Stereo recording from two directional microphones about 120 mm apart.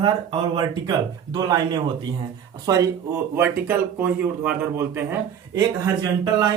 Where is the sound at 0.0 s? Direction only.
40° right (ahead or behind).